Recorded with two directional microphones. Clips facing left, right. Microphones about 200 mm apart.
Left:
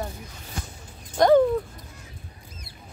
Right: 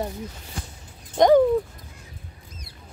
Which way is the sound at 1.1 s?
15° right (ahead or behind).